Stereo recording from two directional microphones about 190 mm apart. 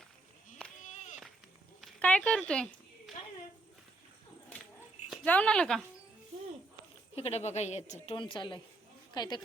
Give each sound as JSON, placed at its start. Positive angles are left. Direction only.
{"t": 0.8, "sound": "run", "side_deg": 40}
{"t": 1.8, "sound": "a sound", "side_deg": 5}
{"t": 5.2, "sound": "a woman's voice", "side_deg": 5}
{"t": 7.2, "sound": "a woman's voice", "side_deg": 35}
{"t": 8.0, "sound": "speech", "side_deg": 25}